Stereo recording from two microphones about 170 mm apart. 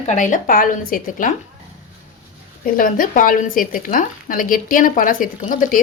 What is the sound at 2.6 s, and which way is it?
A woman's voice, 55° left (ahead or behind).